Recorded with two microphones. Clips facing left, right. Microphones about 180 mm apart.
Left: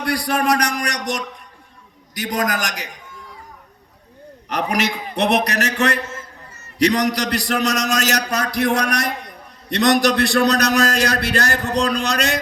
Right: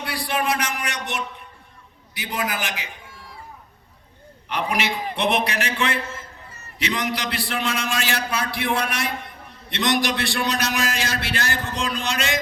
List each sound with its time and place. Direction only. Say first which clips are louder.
0.0 s a man's voice: left 5 dB; 40° left (ahead or behind)
4.4 s a man's voice: left 3 dB; 40° left (ahead or behind)